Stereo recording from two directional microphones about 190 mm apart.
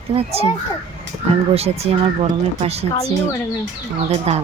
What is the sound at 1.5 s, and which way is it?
Speech, 30° right (ahead or behind).